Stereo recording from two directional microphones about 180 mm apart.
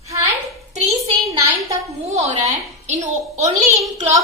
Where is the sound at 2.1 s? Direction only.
40° right (ahead or behind).